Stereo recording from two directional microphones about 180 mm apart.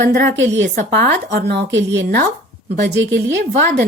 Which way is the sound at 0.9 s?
65° right (ahead or behind).